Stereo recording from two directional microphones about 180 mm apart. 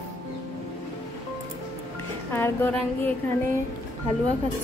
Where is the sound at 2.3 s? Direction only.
15° left (ahead or behind).